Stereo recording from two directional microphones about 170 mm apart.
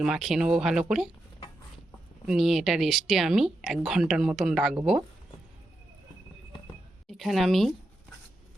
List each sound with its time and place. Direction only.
0.0 s speech: 5° right (ahead or behind)
2.2 s speech: centre (ahead or behind)
7.1 s speech: centre (ahead or behind)